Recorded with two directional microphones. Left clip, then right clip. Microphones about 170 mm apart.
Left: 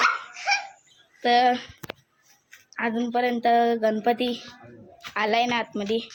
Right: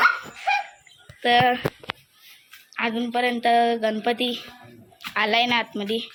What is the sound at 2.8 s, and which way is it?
Speech, 10° left (ahead or behind).